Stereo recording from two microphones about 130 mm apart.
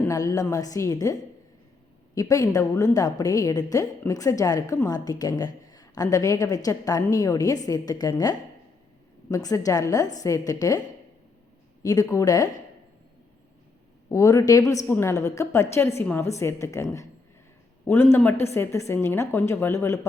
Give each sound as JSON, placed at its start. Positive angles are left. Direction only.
{"t": 0.0, "sound": "a woman's voice", "side_deg": 25}
{"t": 9.3, "sound": "a woman's voice", "side_deg": 25}
{"t": 14.1, "sound": "a woman's voice", "side_deg": 25}